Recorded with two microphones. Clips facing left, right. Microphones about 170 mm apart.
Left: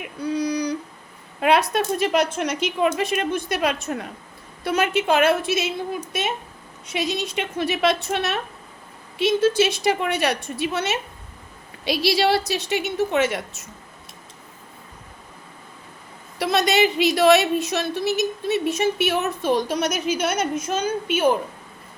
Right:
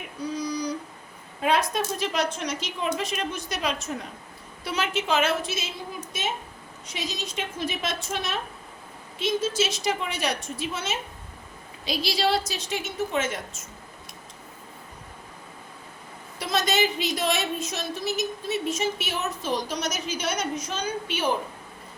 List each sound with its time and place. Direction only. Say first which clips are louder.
0.3 s a sound: left 6 dB; 65° left (ahead or behind)
1.4 s a woman's voice: left 5 dB; 70° left (ahead or behind)
6.8 s a woman's voice: left 8 dB; 65° left (ahead or behind)
16.4 s a woman's voice: left 6 dB; 65° left (ahead or behind); by 21.2 s 50° left (ahead or behind)